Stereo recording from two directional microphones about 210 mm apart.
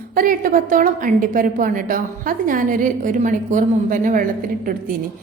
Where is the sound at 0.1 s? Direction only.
40° right (ahead or behind).